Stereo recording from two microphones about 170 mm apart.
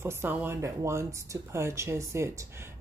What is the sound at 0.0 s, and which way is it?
Speech, 15° right (ahead or behind).